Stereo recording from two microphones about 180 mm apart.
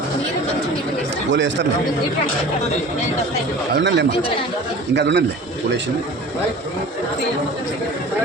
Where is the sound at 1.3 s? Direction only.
85° right.